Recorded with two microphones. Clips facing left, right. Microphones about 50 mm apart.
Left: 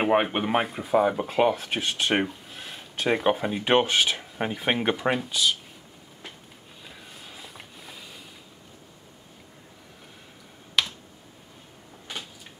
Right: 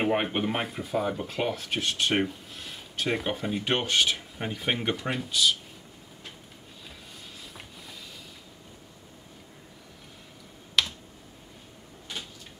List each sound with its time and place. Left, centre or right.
0.0 s speech: centre
7.2 s a sound: centre
10.8 s computer keyboard: centre